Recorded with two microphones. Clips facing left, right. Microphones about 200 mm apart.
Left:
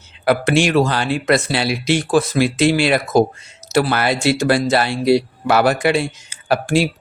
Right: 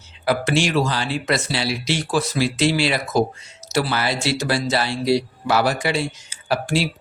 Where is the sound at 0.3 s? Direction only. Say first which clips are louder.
Left 4 dB; 55° left (ahead or behind).